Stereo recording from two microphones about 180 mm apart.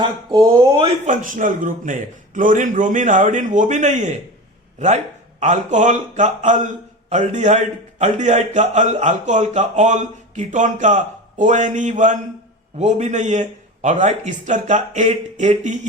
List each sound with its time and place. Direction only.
0.0 s speech: 25° right (ahead or behind)
1.0 s a man's voice: 45° right (ahead or behind)
5.4 s a man's voice: 40° right (ahead or behind)